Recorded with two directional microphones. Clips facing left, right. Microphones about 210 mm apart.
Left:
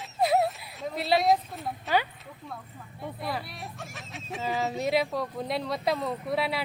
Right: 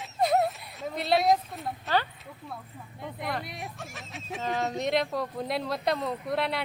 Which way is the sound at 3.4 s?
20° right (ahead or behind).